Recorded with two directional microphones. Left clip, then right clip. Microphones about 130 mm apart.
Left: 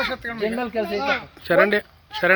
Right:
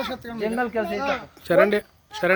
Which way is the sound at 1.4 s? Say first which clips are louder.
Even; 10° right (ahead or behind).